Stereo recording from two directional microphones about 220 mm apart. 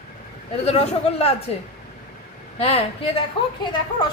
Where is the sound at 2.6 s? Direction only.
25° left (ahead or behind).